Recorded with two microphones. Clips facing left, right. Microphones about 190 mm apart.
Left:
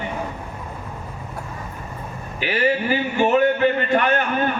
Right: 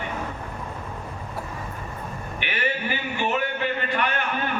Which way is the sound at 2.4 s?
40° left (ahead or behind).